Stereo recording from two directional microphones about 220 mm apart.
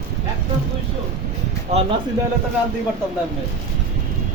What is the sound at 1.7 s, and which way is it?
Speech, 30° right (ahead or behind).